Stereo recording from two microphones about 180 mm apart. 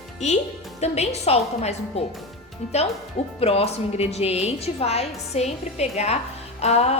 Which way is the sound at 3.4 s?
35° left (ahead or behind).